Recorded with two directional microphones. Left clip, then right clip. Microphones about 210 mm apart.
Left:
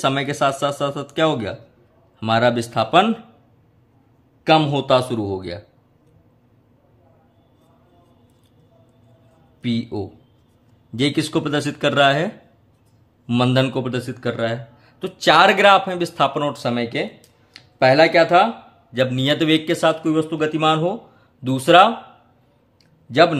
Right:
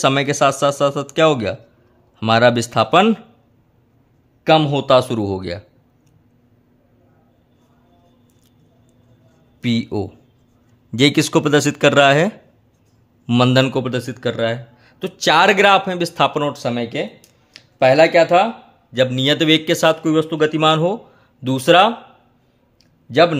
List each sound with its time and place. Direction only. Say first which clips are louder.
0.0 s speech: right 4 dB; 30° right (ahead or behind)
4.5 s speech: right 2 dB; 25° right (ahead or behind)
9.6 s speech: right 4 dB; 35° right (ahead or behind)